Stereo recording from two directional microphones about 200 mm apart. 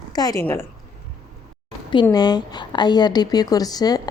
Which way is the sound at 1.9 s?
20° left (ahead or behind).